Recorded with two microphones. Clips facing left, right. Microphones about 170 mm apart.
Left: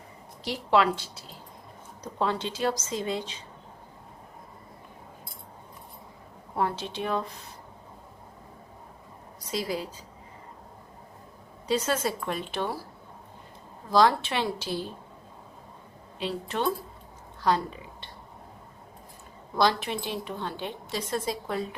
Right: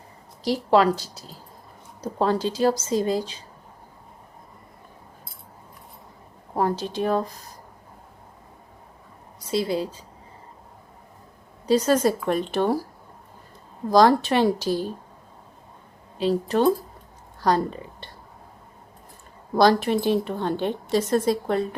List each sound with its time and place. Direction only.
0.4 s a woman's voice: 35° right (ahead or behind)
6.6 s a woman's voice: 40° right (ahead or behind)
9.4 s a woman's voice: 30° right (ahead or behind)
11.7 s a woman's voice: 35° right (ahead or behind)
16.1 s a woman's voice: 35° right (ahead or behind)
19.5 s a woman's voice: 45° right (ahead or behind)